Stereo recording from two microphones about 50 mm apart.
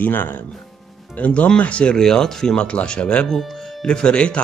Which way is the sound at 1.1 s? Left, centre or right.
Left.